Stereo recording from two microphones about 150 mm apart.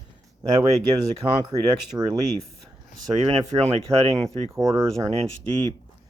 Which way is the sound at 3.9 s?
20° right (ahead or behind).